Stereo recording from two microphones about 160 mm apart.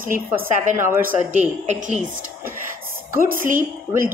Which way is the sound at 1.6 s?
45° right (ahead or behind).